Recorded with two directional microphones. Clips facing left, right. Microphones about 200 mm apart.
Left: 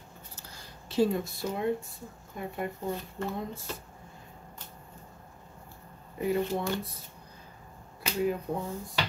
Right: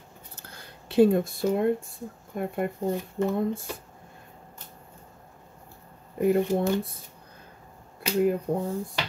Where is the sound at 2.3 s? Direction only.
55° right (ahead or behind).